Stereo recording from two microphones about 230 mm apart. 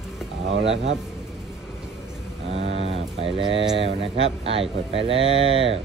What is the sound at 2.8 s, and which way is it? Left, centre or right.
Speech, right.